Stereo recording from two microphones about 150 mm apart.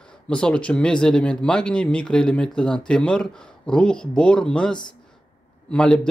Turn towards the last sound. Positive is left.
turn(degrees=5)  # may be behind; listen again after turning